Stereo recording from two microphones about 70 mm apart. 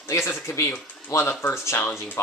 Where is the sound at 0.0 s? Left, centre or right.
Left.